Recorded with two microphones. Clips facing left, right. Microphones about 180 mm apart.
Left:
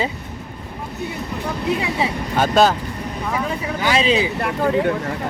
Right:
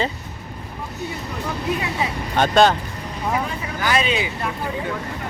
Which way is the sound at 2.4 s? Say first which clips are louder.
Even; 5° left (ahead or behind).